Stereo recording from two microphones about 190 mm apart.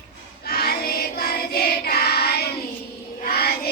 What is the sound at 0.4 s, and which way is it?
Choir, 55° left (ahead or behind).